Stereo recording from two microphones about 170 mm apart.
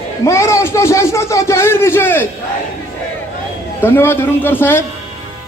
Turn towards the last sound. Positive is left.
turn(degrees=15)  # may be behind; listen again after turning